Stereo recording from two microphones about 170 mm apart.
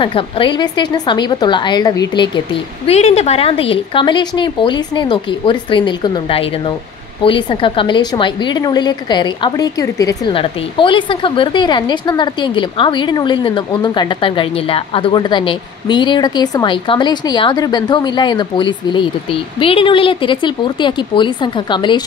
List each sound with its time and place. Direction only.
0.0 s a woman's voice: 30° left (ahead or behind)
2.9 s a woman's voice: 40° left (ahead or behind); by 10.3 s 20° left (ahead or behind)
10.3 s a woman's voice: 30° left (ahead or behind)